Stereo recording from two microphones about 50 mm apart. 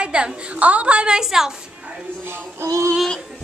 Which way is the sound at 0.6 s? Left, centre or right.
Right.